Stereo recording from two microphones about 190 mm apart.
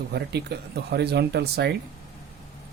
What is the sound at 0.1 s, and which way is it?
Speech, 60° right (ahead or behind).